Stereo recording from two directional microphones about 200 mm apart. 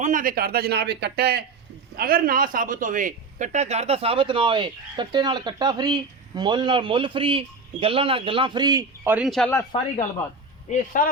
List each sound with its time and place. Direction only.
0.0 s a man's voice: 40° right (ahead or behind); by 8.8 s 20° right (ahead or behind)
9.0 s speech: 5° right (ahead or behind)
10.7 s speech: 40° left (ahead or behind)